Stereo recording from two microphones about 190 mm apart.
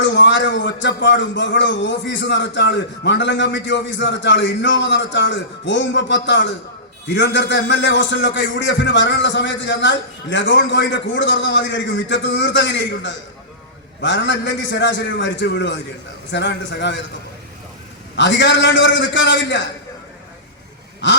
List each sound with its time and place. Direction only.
0.0 s a man's voice: 70° left (ahead or behind)
18.2 s a man's voice: 70° left (ahead or behind)